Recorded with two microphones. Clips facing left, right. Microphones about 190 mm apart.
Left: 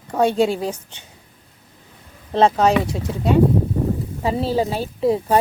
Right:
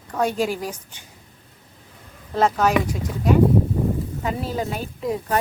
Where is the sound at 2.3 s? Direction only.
30° left (ahead or behind).